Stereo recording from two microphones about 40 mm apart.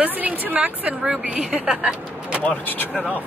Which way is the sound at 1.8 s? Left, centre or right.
Right.